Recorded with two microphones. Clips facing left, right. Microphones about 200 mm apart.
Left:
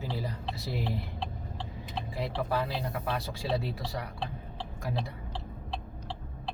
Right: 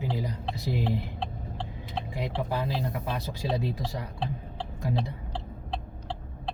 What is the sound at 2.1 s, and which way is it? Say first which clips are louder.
Speech: even; 20° right (ahead or behind).